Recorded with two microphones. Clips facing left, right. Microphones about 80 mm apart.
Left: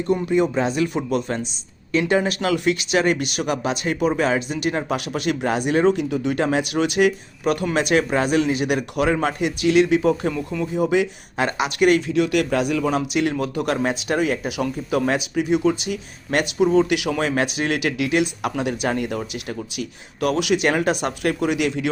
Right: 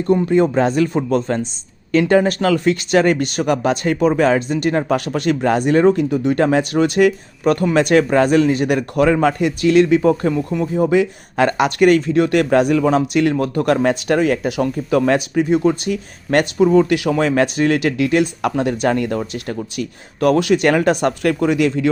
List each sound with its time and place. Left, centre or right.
0.1 s speech: right